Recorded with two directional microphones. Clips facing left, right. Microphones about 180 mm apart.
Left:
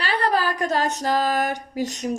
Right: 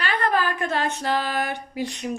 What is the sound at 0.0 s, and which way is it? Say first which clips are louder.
Speech: left 1 dB; 35° left (ahead or behind).